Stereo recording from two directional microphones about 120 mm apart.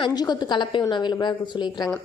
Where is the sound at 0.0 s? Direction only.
35° left (ahead or behind).